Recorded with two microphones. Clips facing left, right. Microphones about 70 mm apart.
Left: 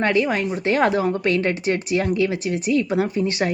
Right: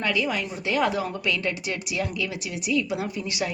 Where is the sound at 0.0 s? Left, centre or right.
Left.